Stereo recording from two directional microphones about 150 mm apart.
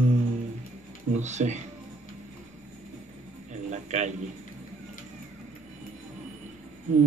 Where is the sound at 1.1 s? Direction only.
50° right (ahead or behind).